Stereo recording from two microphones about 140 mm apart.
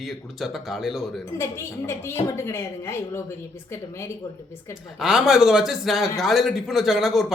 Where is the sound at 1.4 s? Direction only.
20° left (ahead or behind).